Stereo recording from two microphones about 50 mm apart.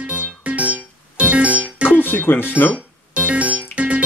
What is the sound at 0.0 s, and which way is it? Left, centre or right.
Music, right.